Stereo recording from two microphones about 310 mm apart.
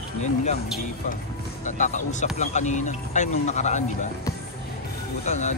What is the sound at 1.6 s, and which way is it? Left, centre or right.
Speech, left.